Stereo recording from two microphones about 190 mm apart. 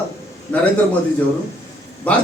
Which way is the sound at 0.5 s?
10° left (ahead or behind).